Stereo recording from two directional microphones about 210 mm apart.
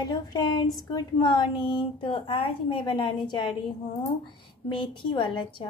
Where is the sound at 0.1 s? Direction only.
20° left (ahead or behind).